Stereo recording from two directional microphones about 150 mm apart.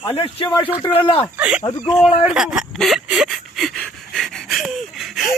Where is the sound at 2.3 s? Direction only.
5° right (ahead or behind).